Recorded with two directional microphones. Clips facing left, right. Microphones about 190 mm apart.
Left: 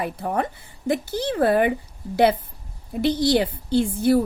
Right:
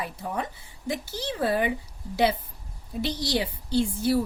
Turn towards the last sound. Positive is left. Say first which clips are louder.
# left 5 dB
turn(degrees=55)  # may be behind; listen again after turning